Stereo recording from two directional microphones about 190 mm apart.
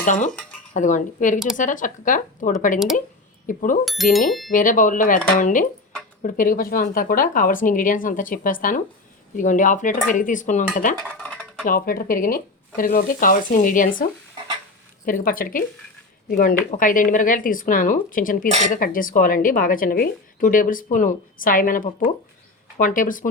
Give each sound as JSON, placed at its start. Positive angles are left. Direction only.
{"t": 0.0, "sound": "speech", "side_deg": 40}
{"t": 2.7, "sound": "speech", "side_deg": 0}
{"t": 3.4, "sound": "speech", "side_deg": 45}
{"t": 3.8, "sound": "speech", "side_deg": 0}
{"t": 4.5, "sound": "speech", "side_deg": 45}
{"t": 11.2, "sound": "dishes", "side_deg": 5}
{"t": 11.6, "sound": "speech", "side_deg": 50}
{"t": 15.0, "sound": "speech", "side_deg": 50}